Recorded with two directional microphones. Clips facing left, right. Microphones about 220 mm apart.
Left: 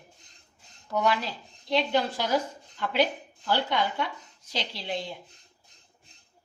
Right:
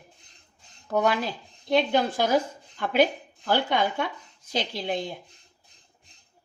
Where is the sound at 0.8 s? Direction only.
50° right (ahead or behind).